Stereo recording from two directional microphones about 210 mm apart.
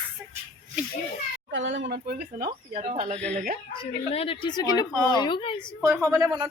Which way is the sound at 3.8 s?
25° left (ahead or behind).